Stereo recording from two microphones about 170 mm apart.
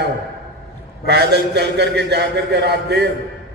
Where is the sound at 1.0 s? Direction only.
80° right.